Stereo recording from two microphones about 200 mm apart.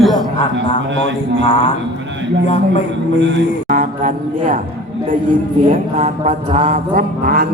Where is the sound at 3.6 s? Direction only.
40° right (ahead or behind).